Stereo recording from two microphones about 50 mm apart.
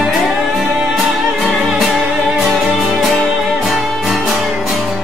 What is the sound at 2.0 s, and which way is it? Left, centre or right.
Music, centre.